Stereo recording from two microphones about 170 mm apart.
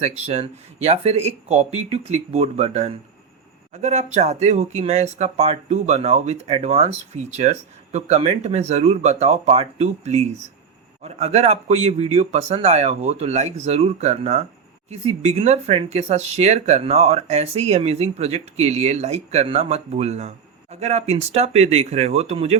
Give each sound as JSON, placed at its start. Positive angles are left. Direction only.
{"t": 0.0, "sound": "speech", "side_deg": -40}